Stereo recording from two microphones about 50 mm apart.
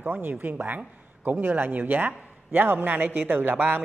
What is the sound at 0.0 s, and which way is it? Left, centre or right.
Speech, right.